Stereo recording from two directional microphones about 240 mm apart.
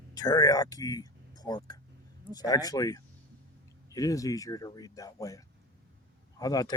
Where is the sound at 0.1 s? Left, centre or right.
Centre.